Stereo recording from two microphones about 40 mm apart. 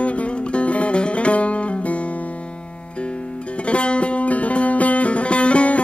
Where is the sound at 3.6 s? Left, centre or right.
Left.